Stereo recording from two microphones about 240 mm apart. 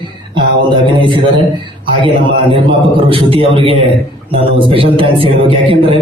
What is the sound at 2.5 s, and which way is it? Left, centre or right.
A man's voice, right.